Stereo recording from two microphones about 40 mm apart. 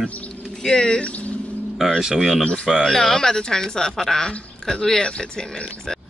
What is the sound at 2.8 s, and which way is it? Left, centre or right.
Speech, centre.